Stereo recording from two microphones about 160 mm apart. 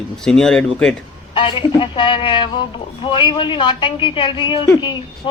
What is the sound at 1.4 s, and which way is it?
Speech, 30° left (ahead or behind).